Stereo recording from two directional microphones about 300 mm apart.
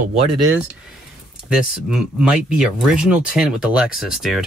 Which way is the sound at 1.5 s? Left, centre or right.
Centre.